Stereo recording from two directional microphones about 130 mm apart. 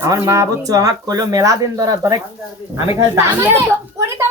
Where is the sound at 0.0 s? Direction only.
25° right (ahead or behind).